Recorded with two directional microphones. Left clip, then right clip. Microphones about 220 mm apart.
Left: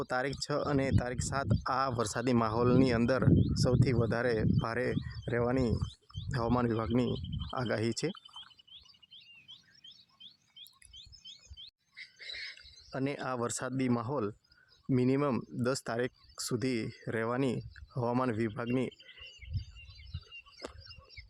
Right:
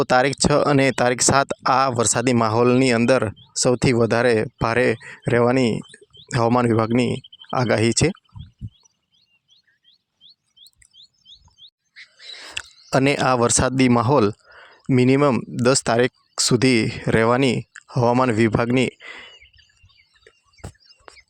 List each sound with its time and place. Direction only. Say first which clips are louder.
0.0 s speech: right 17 dB; 40° right (ahead or behind)
12.5 s speech: right 19 dB; 50° right (ahead or behind)